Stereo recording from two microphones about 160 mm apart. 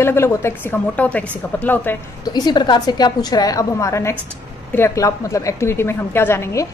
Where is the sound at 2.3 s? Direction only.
25° left (ahead or behind).